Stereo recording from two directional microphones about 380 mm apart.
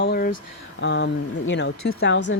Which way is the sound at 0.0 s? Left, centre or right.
Left.